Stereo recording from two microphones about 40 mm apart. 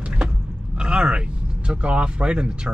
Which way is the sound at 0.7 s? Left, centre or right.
Centre.